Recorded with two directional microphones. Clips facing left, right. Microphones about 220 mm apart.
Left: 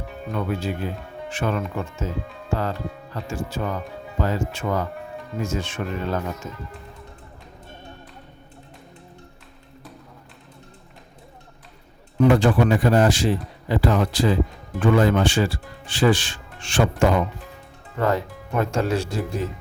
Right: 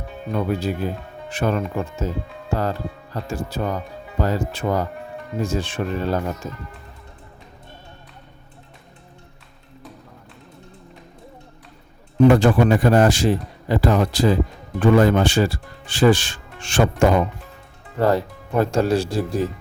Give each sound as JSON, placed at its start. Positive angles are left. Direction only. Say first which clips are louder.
{"t": 0.3, "sound": "speech", "louder": "right 3 dB", "side_deg": -40}
{"t": 12.3, "sound": "speech", "louder": "right 2 dB", "side_deg": -45}
{"t": 18.0, "sound": "speech", "louder": "right 4 dB", "side_deg": -35}